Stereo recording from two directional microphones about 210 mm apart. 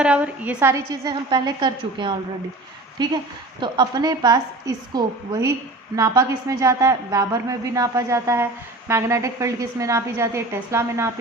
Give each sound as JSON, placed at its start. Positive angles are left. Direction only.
{"t": 0.0, "sound": "a woman's voice", "side_deg": -5}
{"t": 3.6, "sound": "a woman's voice", "side_deg": -20}